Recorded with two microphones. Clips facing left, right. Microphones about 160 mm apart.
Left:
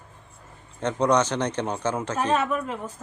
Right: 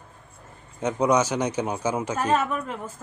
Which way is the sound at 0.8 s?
10° right (ahead or behind).